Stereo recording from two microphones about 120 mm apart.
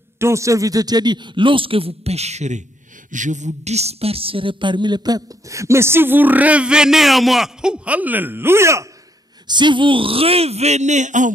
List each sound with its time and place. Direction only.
0.2 s speech: 25° right (ahead or behind); by 2.6 s 70° right (ahead or behind)
3.1 s a woman's voice: 90° right; by 8.8 s 25° right (ahead or behind)
9.5 s speech: 40° right (ahead or behind); by 11.3 s 90° right